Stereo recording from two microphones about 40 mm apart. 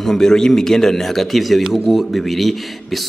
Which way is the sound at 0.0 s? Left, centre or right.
Centre.